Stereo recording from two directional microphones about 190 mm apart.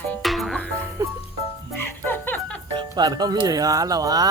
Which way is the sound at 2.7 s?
25° right (ahead or behind).